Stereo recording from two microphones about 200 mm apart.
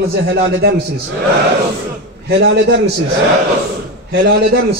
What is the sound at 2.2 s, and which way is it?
Speech, 60° right (ahead or behind).